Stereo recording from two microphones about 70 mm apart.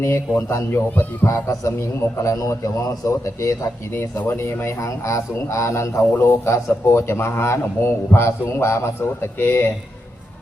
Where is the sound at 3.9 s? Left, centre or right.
Left.